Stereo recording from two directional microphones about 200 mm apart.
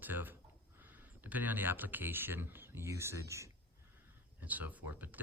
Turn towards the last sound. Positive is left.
turn(degrees=-10)  # may be behind; listen again after turning